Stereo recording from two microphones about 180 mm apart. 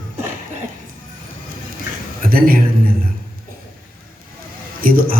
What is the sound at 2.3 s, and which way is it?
Speech, 55° right (ahead or behind).